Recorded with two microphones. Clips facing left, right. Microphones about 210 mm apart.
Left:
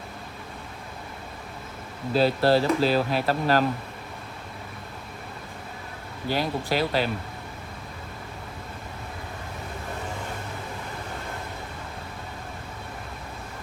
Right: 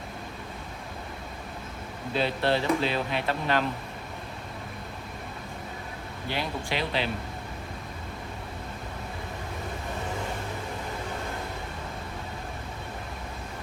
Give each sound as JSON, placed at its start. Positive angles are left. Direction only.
{"t": 2.1, "sound": "speech", "side_deg": 35}
{"t": 6.2, "sound": "speech", "side_deg": 40}